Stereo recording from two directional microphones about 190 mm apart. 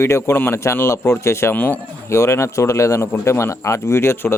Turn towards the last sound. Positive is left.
turn(degrees=10)  # may be behind; listen again after turning